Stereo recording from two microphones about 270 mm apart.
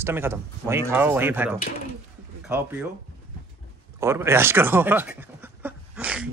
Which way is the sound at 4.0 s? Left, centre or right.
Centre.